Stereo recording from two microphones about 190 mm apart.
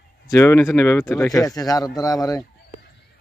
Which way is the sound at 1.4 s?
20° left (ahead or behind).